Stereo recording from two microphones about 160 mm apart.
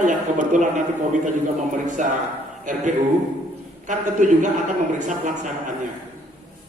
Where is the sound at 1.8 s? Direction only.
50° right (ahead or behind).